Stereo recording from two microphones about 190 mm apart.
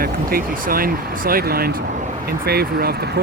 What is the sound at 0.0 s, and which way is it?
Speech, 50° right (ahead or behind).